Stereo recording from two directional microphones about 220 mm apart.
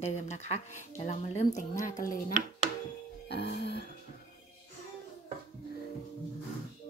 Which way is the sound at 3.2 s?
50° left (ahead or behind).